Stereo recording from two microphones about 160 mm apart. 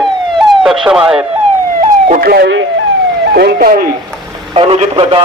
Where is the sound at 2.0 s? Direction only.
65° right (ahead or behind).